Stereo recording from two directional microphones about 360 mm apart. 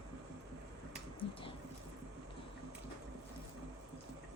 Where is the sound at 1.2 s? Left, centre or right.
Left.